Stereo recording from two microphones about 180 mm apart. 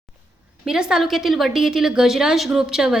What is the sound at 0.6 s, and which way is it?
A woman's voice, 5° right (ahead or behind).